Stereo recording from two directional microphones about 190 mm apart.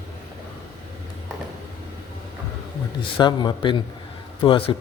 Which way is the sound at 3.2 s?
25° left (ahead or behind).